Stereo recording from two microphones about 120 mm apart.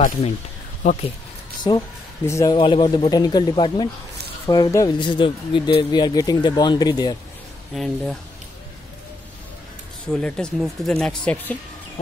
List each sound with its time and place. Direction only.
1.6 s speech: 45° left (ahead or behind)
2.2 s a man's voice: 25° left (ahead or behind)
2.5 s speech: 45° left (ahead or behind)
4.5 s speech: 30° left (ahead or behind)
4.9 s speech: 40° left (ahead or behind)
7.7 s speech: centre (ahead or behind)
10.0 s speech: 5° left (ahead or behind)